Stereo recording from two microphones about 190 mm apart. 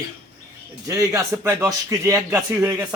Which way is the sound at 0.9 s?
15° right (ahead or behind).